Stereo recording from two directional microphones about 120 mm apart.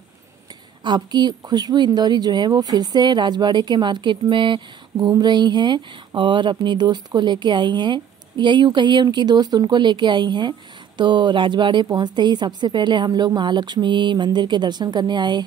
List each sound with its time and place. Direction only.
0.8 s a woman's voice: 35° right (ahead or behind)